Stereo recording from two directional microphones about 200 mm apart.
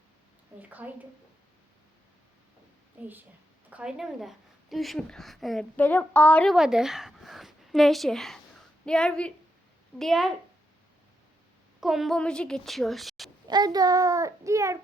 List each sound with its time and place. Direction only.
0.6 s a child's voice: 10° right (ahead or behind)
3.0 s a child's voice: 10° right (ahead or behind)
11.8 s speech: centre (ahead or behind)
13.5 s a child's voice: 20° right (ahead or behind)